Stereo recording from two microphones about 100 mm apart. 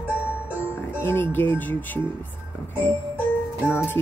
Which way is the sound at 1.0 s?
20° left (ahead or behind).